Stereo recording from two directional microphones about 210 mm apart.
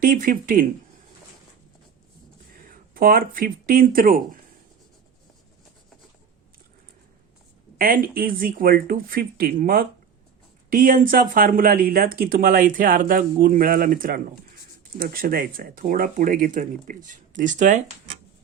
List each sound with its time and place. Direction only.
0.0 s speech: 40° right (ahead or behind)
2.6 s speech: 40° right (ahead or behind)
7.8 s speech: 45° right (ahead or behind)